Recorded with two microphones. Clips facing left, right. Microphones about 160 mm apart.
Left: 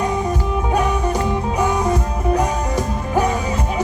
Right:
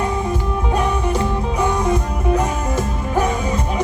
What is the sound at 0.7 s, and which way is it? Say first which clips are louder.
Music: even; 10° left (ahead or behind).